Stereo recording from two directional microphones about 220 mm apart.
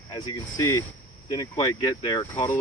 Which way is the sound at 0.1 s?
15° left (ahead or behind).